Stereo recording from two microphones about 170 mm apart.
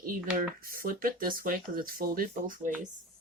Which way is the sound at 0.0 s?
55° right (ahead or behind).